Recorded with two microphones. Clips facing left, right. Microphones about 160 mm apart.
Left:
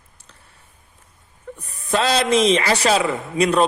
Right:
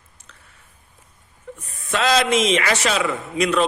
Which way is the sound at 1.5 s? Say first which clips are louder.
Left 4 dB; 35° left (ahead or behind).